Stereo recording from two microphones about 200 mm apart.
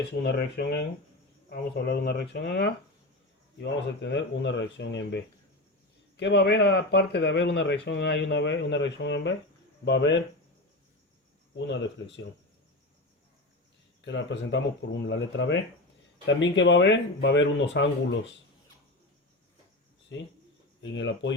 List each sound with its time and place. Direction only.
0.2 s speech: 55° left (ahead or behind)
11.5 s speech: 65° left (ahead or behind)
14.0 s speech: 65° left (ahead or behind)
20.1 s speech: 65° left (ahead or behind)